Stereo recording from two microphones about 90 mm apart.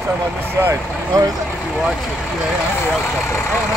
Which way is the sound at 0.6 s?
30° right (ahead or behind).